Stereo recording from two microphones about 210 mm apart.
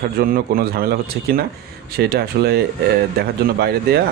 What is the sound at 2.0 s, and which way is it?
Speech, 50° right (ahead or behind).